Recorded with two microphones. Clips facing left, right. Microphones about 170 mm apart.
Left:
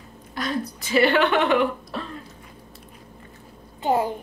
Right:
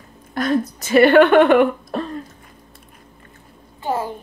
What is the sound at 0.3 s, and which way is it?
A woman's voice, 50° right (ahead or behind).